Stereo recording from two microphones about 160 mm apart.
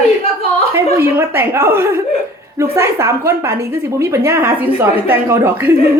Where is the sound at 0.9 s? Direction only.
15° right (ahead or behind).